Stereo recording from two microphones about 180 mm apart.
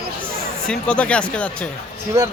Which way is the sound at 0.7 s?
5° left (ahead or behind).